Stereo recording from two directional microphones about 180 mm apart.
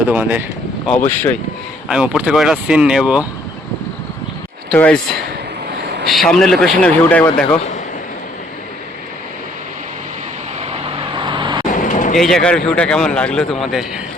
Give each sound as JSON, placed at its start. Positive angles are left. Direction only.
{"t": 0.1, "sound": "speech", "side_deg": -10}
{"t": 0.9, "sound": "speech", "side_deg": 10}
{"t": 1.9, "sound": "speech", "side_deg": -5}
{"t": 4.7, "sound": "speech", "side_deg": 5}
{"t": 6.1, "sound": "speech", "side_deg": 0}
{"t": 11.2, "sound": "vehicle", "side_deg": -25}
{"t": 11.8, "sound": "vehicle", "side_deg": 45}
{"t": 12.1, "sound": "speech", "side_deg": 0}